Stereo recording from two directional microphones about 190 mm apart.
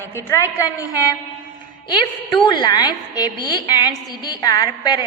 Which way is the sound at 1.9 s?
25° left (ahead or behind).